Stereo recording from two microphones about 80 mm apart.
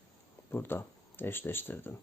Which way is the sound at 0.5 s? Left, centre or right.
Left.